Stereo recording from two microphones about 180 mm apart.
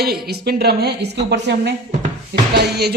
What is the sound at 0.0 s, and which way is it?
A woman's voice, 60° right (ahead or behind).